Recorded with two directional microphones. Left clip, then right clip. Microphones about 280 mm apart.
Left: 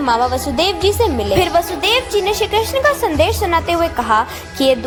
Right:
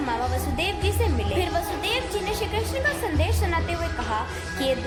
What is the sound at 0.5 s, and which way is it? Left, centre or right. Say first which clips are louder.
A woman's voice: left 11 dB; left.